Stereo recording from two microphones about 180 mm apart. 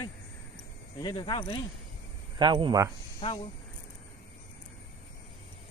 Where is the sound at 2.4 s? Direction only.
25° right (ahead or behind).